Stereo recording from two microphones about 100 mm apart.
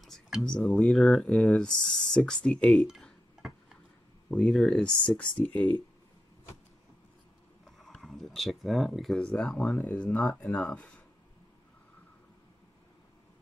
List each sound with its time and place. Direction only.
0.0 s speech: centre (ahead or behind)
4.4 s speech: centre (ahead or behind)
7.9 s speech: centre (ahead or behind)
9.8 s speech: 15° left (ahead or behind)